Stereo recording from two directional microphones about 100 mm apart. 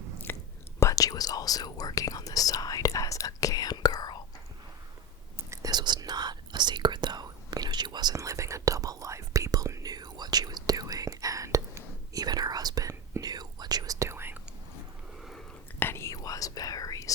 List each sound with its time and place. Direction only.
0.3 s whispering: 20° left (ahead or behind)
0.8 s speech: 35° left (ahead or behind)
5.6 s whispering: 45° right (ahead or behind); by 14.4 s 20° right (ahead or behind)
15.8 s whispering: 25° left (ahead or behind)